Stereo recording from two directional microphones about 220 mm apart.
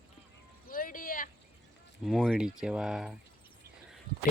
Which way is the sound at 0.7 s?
40° left (ahead or behind).